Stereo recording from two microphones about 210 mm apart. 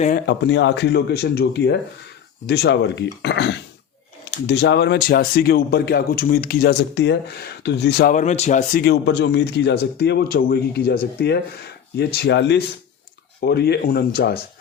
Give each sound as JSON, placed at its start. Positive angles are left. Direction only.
{"t": 0.3, "sound": "speech", "side_deg": 55}
{"t": 8.1, "sound": "speech", "side_deg": 35}
{"t": 8.8, "sound": "speech", "side_deg": 55}